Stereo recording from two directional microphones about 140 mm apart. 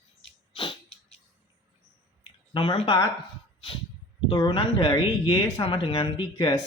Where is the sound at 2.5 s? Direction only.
35° left (ahead or behind).